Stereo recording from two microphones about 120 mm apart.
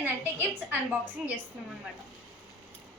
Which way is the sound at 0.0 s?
15° right (ahead or behind).